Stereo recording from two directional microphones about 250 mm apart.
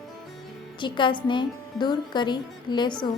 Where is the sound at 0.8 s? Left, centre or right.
Centre.